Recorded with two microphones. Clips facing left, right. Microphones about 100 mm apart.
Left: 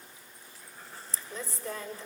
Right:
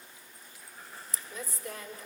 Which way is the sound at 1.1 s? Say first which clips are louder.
Left 2 dB; 30° left (ahead or behind).